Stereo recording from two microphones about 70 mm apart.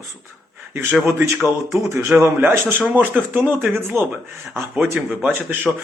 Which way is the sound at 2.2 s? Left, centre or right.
Right.